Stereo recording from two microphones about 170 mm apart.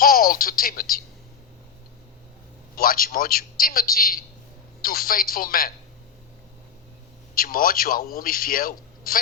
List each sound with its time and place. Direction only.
0.0 s speech: 60° left (ahead or behind)
2.7 s a man's voice: 60° left (ahead or behind)
7.3 s a man's voice: 55° left (ahead or behind)